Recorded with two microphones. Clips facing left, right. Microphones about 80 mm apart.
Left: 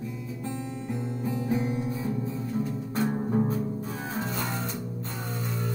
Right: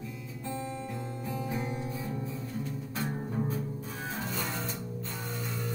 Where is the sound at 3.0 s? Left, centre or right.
Left.